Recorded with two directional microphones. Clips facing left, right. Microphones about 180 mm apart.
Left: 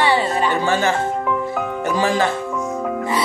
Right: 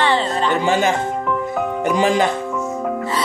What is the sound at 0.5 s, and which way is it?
Speech, 20° right (ahead or behind).